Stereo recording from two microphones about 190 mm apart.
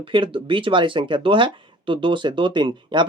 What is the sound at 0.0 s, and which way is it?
Speech, 25° right (ahead or behind).